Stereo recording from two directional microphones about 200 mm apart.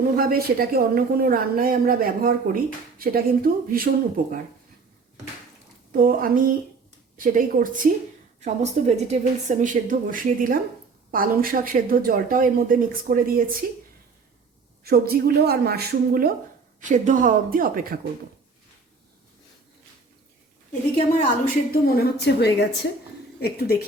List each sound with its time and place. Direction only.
0.2 s speech: 50° right (ahead or behind)
5.9 s a woman's voice: 45° right (ahead or behind)
14.8 s speech: 50° right (ahead or behind)
16.8 s speech: 40° right (ahead or behind)
21.4 s a woman's voice: 50° left (ahead or behind)